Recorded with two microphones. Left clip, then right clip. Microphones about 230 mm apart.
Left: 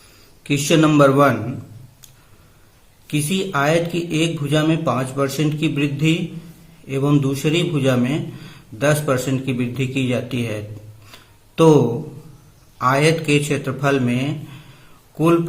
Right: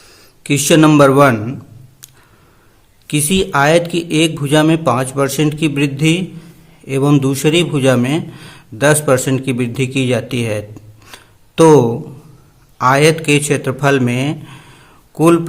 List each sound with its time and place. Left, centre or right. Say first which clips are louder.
0.4 s a man's voice: right 6 dB; right
3.1 s a man's voice: right 7 dB; right
11.0 s a sound: right 6 dB; right
12.8 s a man's voice: right 6 dB; right